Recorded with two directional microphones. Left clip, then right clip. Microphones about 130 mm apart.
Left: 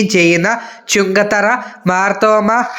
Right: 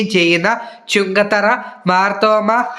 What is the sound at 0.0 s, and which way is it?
Speech, 40° left (ahead or behind).